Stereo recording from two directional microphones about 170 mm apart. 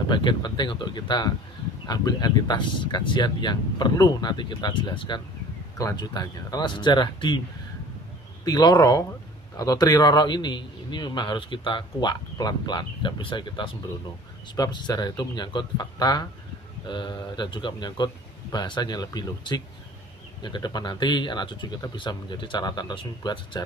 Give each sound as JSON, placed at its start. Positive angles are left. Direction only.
{"t": 0.1, "sound": "a man's voice", "side_deg": 25}
{"t": 8.5, "sound": "a man's voice", "side_deg": 25}